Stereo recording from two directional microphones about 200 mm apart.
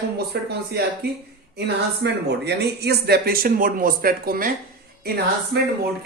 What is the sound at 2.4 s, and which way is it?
Speech, 55° right (ahead or behind).